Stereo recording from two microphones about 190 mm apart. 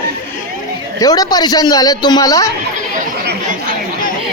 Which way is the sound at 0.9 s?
20° left (ahead or behind).